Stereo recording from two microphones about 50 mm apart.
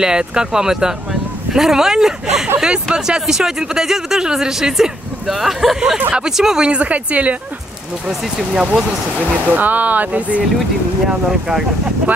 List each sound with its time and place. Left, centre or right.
0.0 s speech: centre
5.9 s speech: right
6.2 s speech: centre; by 7.3 s right
8.1 s speech: centre
9.1 s speech: right
11.1 s speech: centre